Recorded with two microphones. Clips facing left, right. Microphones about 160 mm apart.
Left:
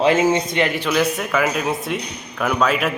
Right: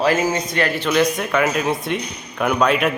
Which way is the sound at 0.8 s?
5° left (ahead or behind).